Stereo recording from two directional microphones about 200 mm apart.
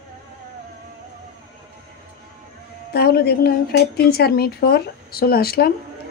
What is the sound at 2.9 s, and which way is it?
Speech, 50° left (ahead or behind).